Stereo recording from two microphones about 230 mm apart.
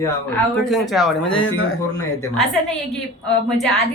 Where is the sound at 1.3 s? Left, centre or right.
Left.